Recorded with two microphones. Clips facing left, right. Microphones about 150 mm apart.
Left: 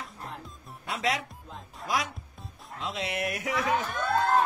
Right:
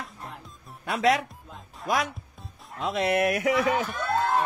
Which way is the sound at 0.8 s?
55° right (ahead or behind).